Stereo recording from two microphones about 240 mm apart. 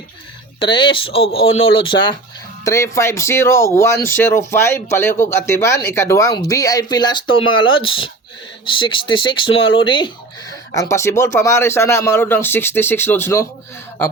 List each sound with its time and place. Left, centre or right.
0.6 s speech: centre
1.5 s speech: left
1.7 s speech: left
9.5 s speech: left
9.8 s speech: centre